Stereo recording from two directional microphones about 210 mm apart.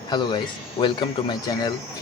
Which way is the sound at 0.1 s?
20° left (ahead or behind).